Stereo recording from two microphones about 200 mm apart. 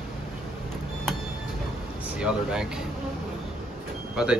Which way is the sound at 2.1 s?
5° right (ahead or behind).